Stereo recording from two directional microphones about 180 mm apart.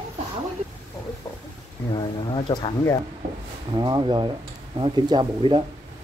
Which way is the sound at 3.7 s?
25° right (ahead or behind).